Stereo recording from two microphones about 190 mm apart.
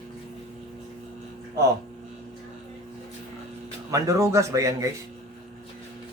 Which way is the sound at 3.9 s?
15° right (ahead or behind).